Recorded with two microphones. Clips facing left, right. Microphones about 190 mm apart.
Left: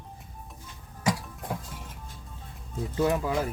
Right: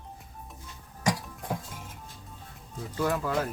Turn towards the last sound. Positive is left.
turn(degrees=15)  # may be behind; listen again after turning